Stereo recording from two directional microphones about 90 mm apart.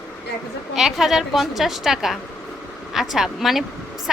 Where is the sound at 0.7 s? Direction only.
5° right (ahead or behind).